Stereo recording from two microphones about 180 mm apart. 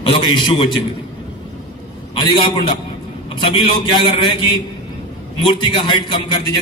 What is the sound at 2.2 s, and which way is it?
A man's voice, 25° left (ahead or behind).